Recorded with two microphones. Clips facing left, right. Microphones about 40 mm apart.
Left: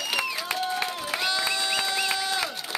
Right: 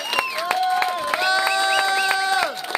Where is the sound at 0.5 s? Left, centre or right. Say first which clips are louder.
Right 10 dB; right.